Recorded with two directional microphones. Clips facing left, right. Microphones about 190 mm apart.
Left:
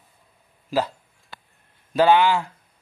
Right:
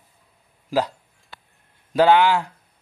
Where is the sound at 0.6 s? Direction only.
15° right (ahead or behind).